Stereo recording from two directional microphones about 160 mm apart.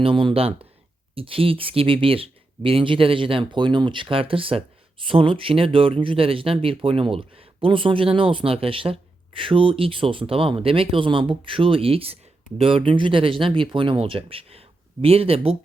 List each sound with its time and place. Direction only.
0.0 s speech: 35° right (ahead or behind)